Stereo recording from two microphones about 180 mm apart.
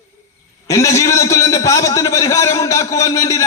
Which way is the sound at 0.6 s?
15° left (ahead or behind).